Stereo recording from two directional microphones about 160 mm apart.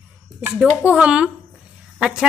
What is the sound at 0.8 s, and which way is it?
Speech, 5° right (ahead or behind).